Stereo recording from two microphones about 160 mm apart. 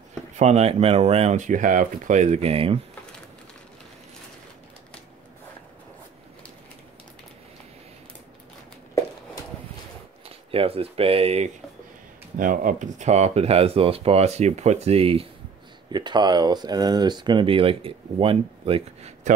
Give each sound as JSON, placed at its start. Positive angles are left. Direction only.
{"t": 0.4, "sound": "speech", "side_deg": -45}
{"t": 10.2, "sound": "speech", "side_deg": -35}
{"t": 12.4, "sound": "speech", "side_deg": -55}
{"t": 15.9, "sound": "speech", "side_deg": -25}